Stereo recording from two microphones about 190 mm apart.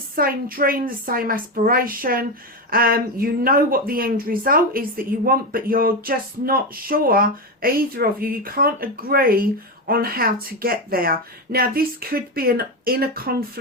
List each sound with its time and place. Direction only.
0.2 s speech: 50° right (ahead or behind)